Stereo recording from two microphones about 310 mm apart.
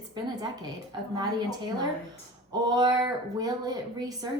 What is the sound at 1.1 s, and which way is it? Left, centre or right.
A woman's voice, centre.